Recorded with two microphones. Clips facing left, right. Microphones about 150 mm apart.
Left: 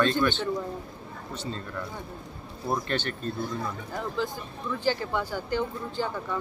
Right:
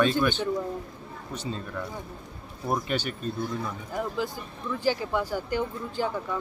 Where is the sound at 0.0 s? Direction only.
10° right (ahead or behind).